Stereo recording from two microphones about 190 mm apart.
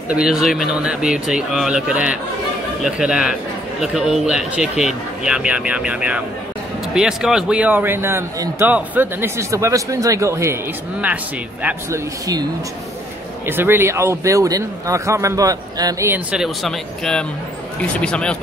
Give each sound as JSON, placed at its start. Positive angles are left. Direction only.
{"t": 0.1, "sound": "speech", "side_deg": -5}
{"t": 13.5, "sound": "speech", "side_deg": -10}